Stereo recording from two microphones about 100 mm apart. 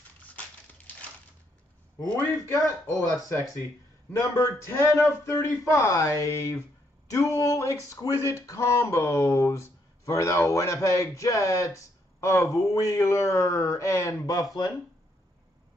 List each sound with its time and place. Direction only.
2.4 s speech: 35° left (ahead or behind)